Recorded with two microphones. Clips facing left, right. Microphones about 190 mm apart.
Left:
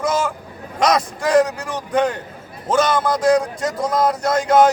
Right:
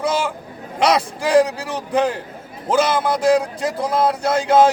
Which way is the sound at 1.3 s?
30° right (ahead or behind).